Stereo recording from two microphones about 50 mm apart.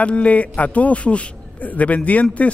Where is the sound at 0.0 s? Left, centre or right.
Left.